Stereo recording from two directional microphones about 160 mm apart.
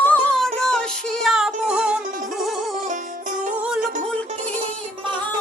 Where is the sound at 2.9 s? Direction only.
55° right (ahead or behind).